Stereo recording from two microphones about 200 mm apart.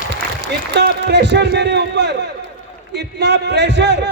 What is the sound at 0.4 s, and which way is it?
A man's voice, 60° right (ahead or behind).